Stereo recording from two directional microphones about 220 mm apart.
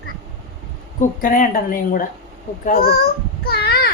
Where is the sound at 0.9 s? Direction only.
40° left (ahead or behind).